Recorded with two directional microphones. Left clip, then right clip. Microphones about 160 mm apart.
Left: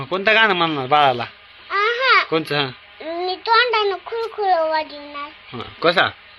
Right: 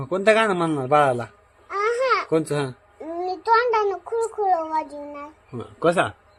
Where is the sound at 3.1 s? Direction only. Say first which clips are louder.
Left 3 dB; 15° right (ahead or behind).